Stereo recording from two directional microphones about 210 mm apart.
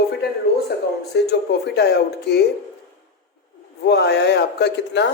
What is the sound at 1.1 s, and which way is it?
Speech, 50° left (ahead or behind).